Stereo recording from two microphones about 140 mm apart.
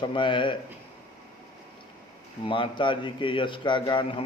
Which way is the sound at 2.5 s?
35° left (ahead or behind).